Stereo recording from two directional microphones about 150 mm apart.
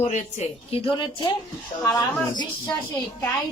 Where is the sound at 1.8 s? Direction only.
10° left (ahead or behind).